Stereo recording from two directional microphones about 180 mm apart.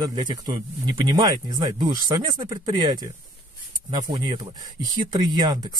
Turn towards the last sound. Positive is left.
turn(degrees=-25)  # may be behind; listen again after turning